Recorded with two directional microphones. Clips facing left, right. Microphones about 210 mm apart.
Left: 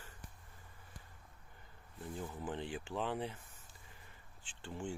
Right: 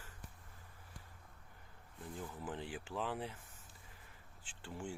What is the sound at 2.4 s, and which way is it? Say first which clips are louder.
Speech: left 3 dB; 5° right (ahead or behind).